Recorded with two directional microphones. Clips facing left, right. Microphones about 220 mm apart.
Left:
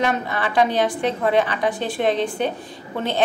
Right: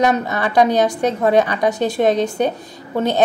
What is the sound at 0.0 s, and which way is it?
A woman's voice, 40° right (ahead or behind).